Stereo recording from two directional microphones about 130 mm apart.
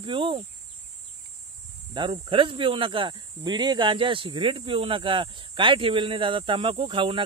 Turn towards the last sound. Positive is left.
turn(degrees=-40)  # may be behind; listen again after turning